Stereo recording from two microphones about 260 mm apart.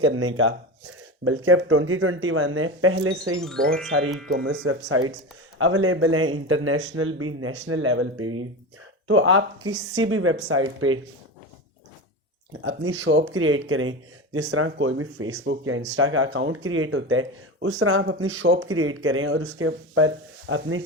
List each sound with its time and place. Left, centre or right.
0.0 s speech: right
3.4 s speech: centre
4.3 s speech: right
12.6 s speech: right